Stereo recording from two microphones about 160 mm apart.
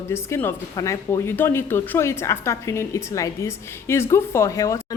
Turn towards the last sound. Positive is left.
turn(degrees=20)  # may be behind; listen again after turning